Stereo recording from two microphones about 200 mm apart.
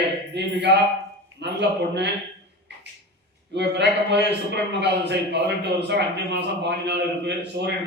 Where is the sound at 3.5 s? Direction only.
60° right (ahead or behind).